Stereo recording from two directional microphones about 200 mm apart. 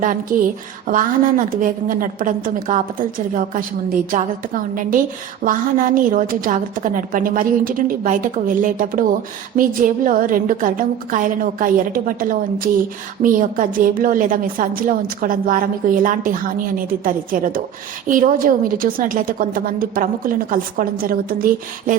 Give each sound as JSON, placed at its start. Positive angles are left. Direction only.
{"t": 0.0, "sound": "a woman's voice", "side_deg": -45}
{"t": 4.7, "sound": "a woman's voice", "side_deg": -45}